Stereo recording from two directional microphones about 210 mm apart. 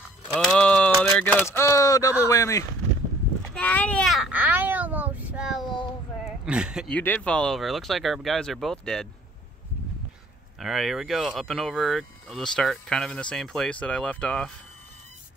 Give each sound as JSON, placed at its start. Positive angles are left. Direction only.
{"t": 0.3, "sound": "a sound", "side_deg": 5}
{"t": 2.2, "sound": "speech", "side_deg": 15}
{"t": 3.5, "sound": "a sound", "side_deg": 5}
{"t": 6.4, "sound": "speech", "side_deg": -5}
{"t": 6.9, "sound": "speech", "side_deg": 5}
{"t": 10.6, "sound": "speech", "side_deg": 0}